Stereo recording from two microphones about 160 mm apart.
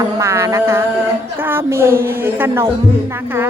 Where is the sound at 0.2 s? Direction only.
20° right (ahead or behind).